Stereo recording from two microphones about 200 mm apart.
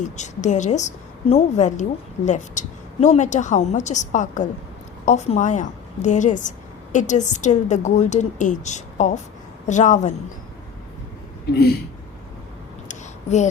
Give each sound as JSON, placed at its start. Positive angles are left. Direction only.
{"t": 0.0, "sound": "a woman's voice", "side_deg": 35}
{"t": 11.5, "sound": "speech", "side_deg": 55}
{"t": 12.9, "sound": "a sound", "side_deg": 35}